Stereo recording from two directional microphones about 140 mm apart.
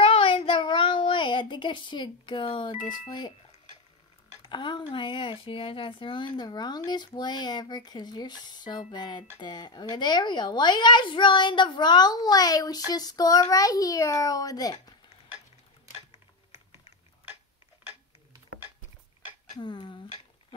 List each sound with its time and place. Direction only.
0.0 s child singing: 45° left (ahead or behind)
3.1 s speech: 30° left (ahead or behind)
4.4 s a child's voice: 35° left (ahead or behind)
19.5 s speech: 35° left (ahead or behind)